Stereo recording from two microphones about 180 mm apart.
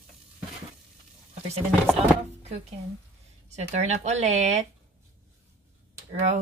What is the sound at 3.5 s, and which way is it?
Speech, 40° right (ahead or behind).